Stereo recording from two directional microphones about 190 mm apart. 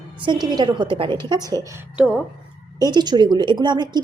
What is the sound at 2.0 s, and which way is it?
Speech, 5° right (ahead or behind).